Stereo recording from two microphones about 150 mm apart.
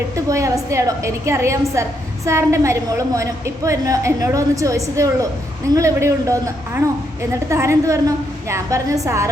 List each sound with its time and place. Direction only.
0.3 s a woman's voice: 20° right (ahead or behind)